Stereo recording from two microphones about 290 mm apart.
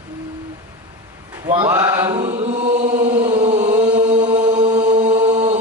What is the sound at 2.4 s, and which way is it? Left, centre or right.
Chant, right.